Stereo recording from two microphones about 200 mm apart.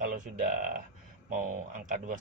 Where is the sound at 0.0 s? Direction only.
40° right (ahead or behind).